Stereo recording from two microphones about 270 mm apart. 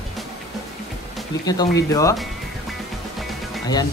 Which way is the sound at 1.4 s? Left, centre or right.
Centre.